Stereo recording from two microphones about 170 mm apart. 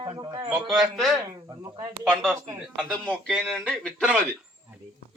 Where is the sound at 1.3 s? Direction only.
20° right (ahead or behind).